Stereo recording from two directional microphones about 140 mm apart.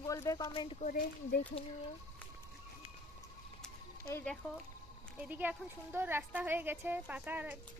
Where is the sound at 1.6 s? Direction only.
45° left (ahead or behind).